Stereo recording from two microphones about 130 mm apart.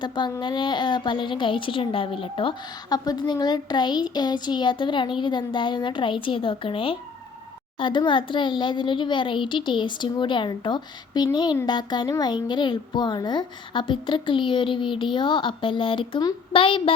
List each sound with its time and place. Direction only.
0.0 s a child's voice: 35° left (ahead or behind)